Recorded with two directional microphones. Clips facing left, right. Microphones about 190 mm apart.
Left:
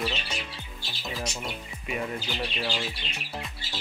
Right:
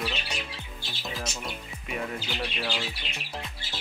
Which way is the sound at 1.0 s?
Centre (ahead or behind).